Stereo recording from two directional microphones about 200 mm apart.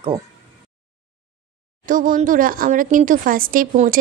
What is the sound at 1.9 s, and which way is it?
Speech, 40° right (ahead or behind).